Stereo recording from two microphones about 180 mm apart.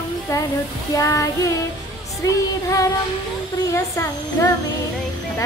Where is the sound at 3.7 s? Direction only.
15° left (ahead or behind).